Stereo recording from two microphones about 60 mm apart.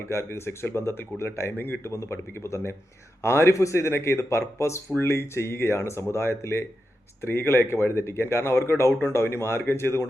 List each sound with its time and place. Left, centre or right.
0.0 s speech: left
1.9 s a man's voice: left